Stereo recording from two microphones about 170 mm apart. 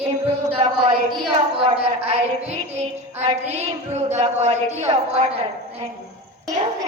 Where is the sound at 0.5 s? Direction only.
25° right (ahead or behind).